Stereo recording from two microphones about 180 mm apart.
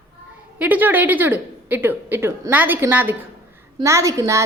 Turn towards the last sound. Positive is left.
turn(degrees=-15)  # may be behind; listen again after turning